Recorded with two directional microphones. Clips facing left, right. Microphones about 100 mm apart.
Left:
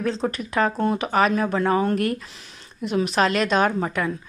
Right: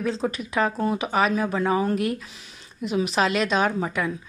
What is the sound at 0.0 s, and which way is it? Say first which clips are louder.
Speech: left 1 dB; centre (ahead or behind).